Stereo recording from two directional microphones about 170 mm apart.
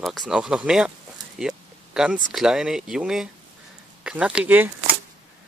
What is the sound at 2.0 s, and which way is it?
Speech, centre (ahead or behind).